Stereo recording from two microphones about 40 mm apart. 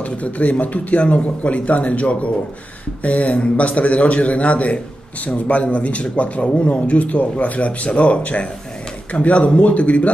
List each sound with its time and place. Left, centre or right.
0.0 s speech: left